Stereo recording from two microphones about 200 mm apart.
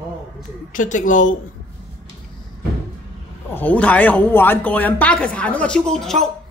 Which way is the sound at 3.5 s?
5° left (ahead or behind).